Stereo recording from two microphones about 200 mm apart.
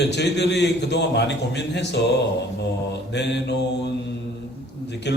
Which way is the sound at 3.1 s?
60° left (ahead or behind).